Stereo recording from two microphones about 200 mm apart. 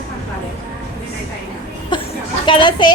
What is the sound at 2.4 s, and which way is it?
Speech, 25° left (ahead or behind).